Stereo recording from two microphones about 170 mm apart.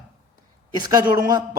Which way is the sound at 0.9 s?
20° right (ahead or behind).